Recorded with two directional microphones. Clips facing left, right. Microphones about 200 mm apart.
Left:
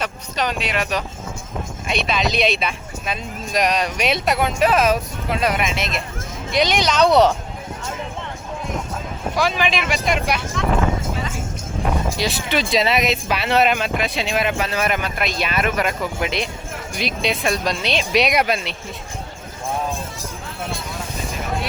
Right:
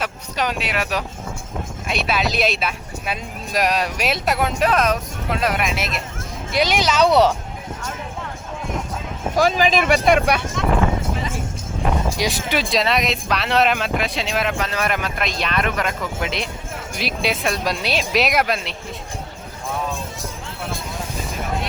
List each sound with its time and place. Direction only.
0.0 s speech: 10° right (ahead or behind)
9.3 s speech: 45° right (ahead or behind)
9.9 s speech: 55° right (ahead or behind)
12.1 s speech: 15° right (ahead or behind)
12.7 s speech: centre (ahead or behind)